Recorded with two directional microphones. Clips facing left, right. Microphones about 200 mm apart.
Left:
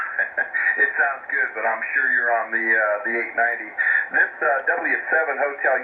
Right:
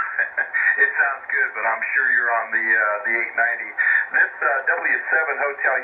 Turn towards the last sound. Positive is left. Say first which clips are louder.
# left 2 dB
turn(degrees=30)  # may be behind; listen again after turning